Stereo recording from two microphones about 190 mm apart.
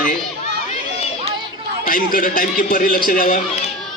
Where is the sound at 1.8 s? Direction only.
45° left (ahead or behind).